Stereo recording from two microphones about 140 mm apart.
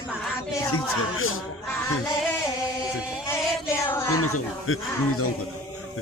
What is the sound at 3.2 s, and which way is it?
Music, 20° left (ahead or behind).